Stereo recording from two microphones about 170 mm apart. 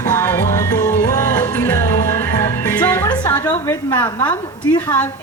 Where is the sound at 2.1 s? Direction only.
15° left (ahead or behind).